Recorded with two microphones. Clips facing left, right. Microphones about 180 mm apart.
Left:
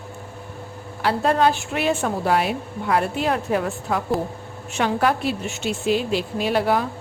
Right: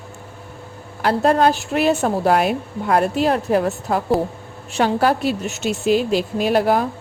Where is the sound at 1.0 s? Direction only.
45° right (ahead or behind).